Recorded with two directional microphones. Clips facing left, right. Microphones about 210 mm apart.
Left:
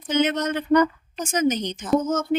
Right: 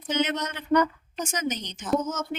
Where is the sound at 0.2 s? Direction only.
50° left (ahead or behind).